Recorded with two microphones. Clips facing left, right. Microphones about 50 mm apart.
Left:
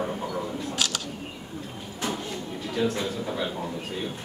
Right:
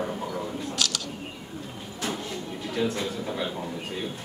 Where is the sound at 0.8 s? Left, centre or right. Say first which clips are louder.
Even; left.